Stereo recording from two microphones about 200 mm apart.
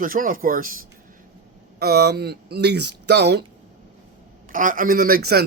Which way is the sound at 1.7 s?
50° right (ahead or behind).